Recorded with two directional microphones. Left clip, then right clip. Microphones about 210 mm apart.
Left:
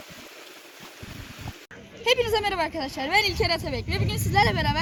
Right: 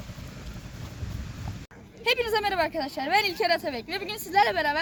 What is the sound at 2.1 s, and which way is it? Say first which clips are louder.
Speech: left 2 dB; 30° right (ahead or behind).